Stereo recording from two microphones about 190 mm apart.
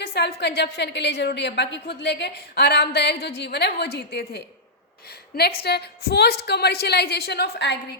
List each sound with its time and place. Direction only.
0.0 s a woman's voice: 60° left (ahead or behind)
5.6 s a woman's voice: 60° left (ahead or behind)